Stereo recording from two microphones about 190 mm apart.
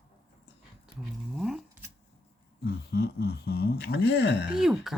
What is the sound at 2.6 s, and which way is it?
Speech, 60° left (ahead or behind).